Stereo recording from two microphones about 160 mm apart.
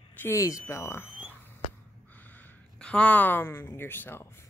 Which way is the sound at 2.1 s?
10° left (ahead or behind).